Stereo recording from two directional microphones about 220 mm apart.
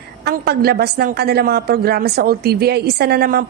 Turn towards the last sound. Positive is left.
turn(degrees=-45)  # may be behind; listen again after turning